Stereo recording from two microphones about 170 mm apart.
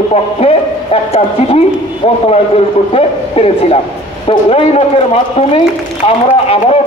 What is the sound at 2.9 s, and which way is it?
A man's voice, 35° left (ahead or behind).